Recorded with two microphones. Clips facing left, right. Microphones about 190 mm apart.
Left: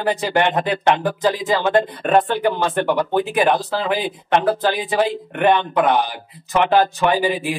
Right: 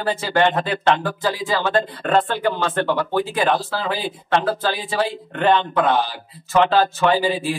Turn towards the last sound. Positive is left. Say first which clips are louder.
# even
turn(degrees=15)  # may be behind; listen again after turning